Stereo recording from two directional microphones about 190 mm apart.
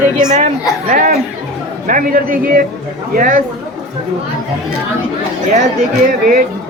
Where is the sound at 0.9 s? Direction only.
45° right (ahead or behind).